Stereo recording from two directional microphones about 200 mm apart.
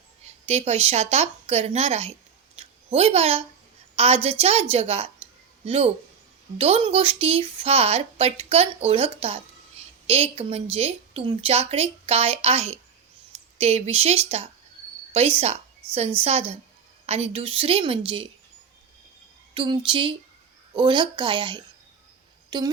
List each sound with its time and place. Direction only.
0.4 s a woman's voice: 30° right (ahead or behind)
2.6 s a sound: 30° right (ahead or behind)
3.9 s a woman's voice: 30° right (ahead or behind)
10.1 s a woman's voice: 30° right (ahead or behind)
19.5 s speech: 25° right (ahead or behind)